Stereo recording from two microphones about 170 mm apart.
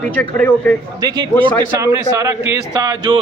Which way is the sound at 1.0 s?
20° right (ahead or behind).